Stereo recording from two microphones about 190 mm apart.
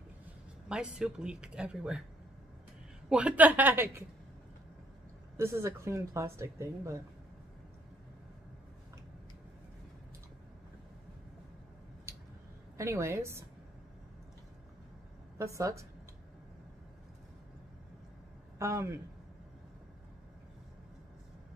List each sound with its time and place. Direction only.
0.7 s speech: 5° right (ahead or behind)
3.1 s speech: 5° right (ahead or behind)
5.4 s speech: 15° right (ahead or behind)
12.7 s speech: 15° right (ahead or behind)
15.3 s speech: 15° right (ahead or behind)
18.6 s speech: 15° right (ahead or behind)